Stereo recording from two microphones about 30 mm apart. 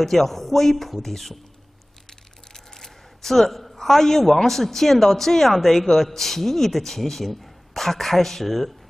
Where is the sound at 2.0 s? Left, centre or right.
Centre.